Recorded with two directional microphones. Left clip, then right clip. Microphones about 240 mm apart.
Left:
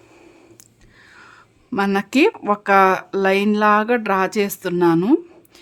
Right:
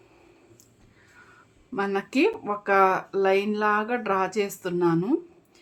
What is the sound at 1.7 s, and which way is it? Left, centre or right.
Speech, left.